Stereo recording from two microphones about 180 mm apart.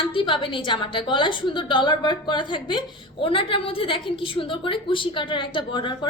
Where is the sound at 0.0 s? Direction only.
30° left (ahead or behind).